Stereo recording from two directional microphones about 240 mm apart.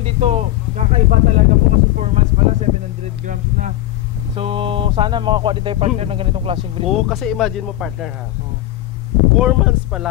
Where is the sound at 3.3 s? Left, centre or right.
Right.